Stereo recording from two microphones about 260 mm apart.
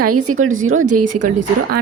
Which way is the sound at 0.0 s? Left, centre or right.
Right.